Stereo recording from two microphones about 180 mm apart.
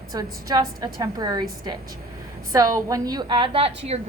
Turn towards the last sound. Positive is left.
turn(degrees=-30)  # may be behind; listen again after turning